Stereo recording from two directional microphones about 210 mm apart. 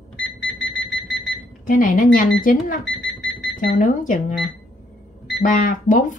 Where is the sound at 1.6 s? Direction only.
40° left (ahead or behind).